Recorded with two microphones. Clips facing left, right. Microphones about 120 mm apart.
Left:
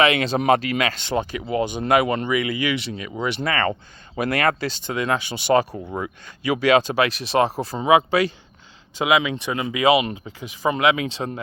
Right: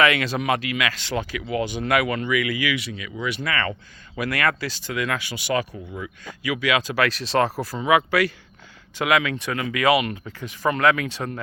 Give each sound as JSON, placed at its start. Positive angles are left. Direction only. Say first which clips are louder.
{"t": 0.0, "sound": "speech", "louder": "left 2 dB", "side_deg": 25}